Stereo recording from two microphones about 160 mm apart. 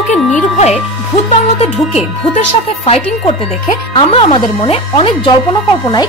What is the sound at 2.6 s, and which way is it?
Speech, 40° left (ahead or behind).